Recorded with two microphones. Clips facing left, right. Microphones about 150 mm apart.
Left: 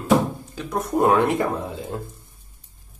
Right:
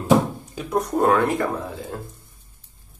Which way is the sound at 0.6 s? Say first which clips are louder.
Right 4 dB; centre (ahead or behind).